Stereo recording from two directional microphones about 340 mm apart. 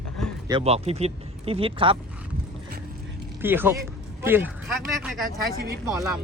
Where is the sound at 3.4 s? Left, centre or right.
Centre.